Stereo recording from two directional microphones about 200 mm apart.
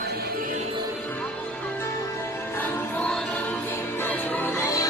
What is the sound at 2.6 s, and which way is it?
Music, 10° left (ahead or behind).